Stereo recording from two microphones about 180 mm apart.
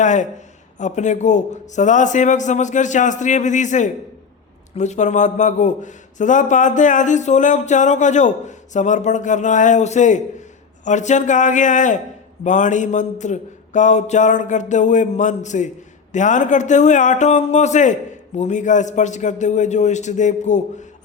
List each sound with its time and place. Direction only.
0.0 s a man's voice: 45° left (ahead or behind)